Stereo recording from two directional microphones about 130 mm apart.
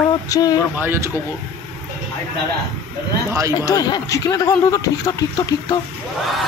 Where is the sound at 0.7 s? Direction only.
15° right (ahead or behind).